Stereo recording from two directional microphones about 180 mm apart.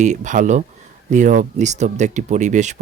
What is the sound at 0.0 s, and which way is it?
Speech, 40° right (ahead or behind).